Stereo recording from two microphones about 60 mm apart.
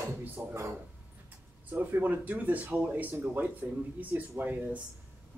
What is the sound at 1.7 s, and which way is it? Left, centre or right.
Speech, right.